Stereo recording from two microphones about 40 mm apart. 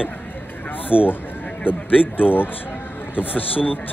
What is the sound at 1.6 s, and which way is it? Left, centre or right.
Speech, left.